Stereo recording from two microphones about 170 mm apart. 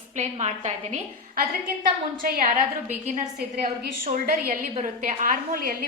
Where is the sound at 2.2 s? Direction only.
50° right (ahead or behind).